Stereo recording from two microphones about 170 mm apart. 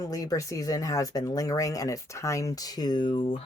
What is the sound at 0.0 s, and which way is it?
Speech, 20° left (ahead or behind).